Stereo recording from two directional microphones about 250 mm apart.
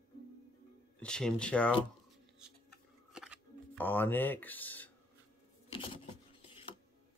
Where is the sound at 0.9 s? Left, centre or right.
Centre.